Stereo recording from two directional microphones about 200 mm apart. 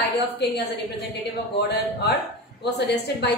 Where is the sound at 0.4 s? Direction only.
55° left (ahead or behind).